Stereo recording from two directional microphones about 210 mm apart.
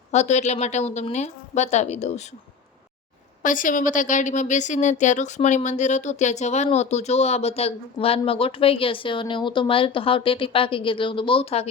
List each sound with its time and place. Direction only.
0.1 s a woman's voice: 35° left (ahead or behind)
3.4 s a woman's voice: 40° left (ahead or behind)